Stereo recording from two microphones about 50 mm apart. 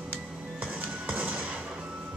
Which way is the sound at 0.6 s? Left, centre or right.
Right.